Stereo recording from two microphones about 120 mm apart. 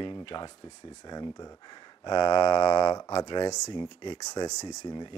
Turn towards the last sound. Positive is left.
turn(degrees=40)  # may be behind; listen again after turning